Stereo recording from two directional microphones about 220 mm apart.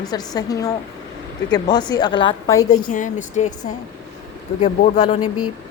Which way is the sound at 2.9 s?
35° left (ahead or behind).